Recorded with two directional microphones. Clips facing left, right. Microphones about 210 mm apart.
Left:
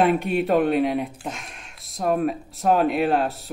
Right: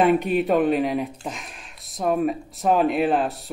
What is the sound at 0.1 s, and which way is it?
Speech, centre (ahead or behind).